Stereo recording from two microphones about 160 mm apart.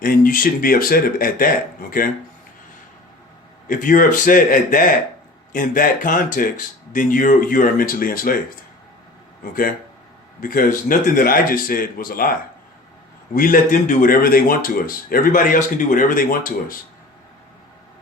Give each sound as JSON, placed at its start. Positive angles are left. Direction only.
{"t": 0.0, "sound": "a man's voice", "side_deg": 60}
{"t": 3.7, "sound": "a man's voice", "side_deg": 55}
{"t": 9.4, "sound": "a man's voice", "side_deg": 60}